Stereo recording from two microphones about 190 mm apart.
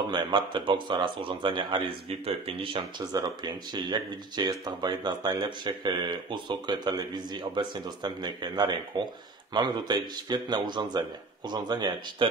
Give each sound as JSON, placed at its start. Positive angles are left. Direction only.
{"t": 0.1, "sound": "speech", "side_deg": -25}